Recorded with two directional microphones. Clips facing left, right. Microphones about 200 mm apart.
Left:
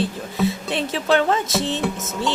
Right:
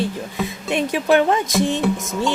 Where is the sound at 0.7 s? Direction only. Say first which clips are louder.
Right 6 dB; 15° right (ahead or behind).